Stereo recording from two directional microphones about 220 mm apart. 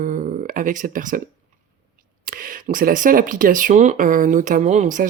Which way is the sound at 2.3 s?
40° right (ahead or behind).